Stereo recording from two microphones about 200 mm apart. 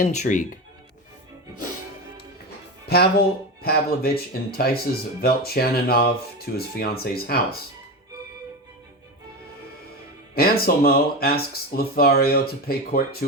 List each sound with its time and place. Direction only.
0.0 s speech: 40° left (ahead or behind)
2.8 s speech: 55° left (ahead or behind)
10.3 s speech: 50° left (ahead or behind)